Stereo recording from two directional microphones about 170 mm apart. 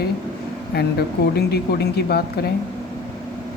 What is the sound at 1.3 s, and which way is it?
Speech, 70° left (ahead or behind).